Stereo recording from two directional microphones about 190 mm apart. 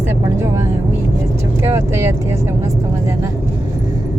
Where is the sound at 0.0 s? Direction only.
15° right (ahead or behind).